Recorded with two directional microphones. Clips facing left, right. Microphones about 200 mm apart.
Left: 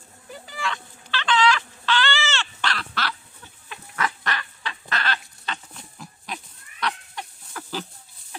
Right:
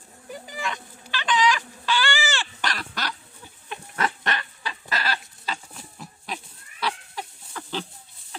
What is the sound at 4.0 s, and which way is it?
Goose, 25° right (ahead or behind).